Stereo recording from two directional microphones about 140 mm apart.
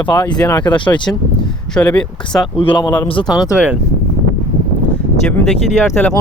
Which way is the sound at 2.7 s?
30° left (ahead or behind).